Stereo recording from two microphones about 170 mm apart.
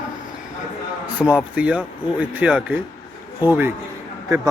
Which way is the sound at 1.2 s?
Centre (ahead or behind).